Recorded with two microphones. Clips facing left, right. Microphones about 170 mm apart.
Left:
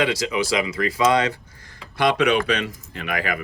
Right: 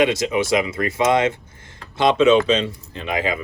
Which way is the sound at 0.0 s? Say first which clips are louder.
Right 4 dB; 25° right (ahead or behind).